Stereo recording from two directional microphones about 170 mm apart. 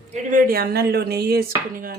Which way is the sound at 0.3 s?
55° right (ahead or behind).